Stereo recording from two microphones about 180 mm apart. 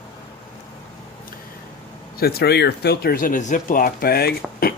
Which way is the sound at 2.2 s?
60° left (ahead or behind).